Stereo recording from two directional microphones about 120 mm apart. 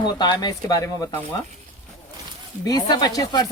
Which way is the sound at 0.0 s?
40° left (ahead or behind).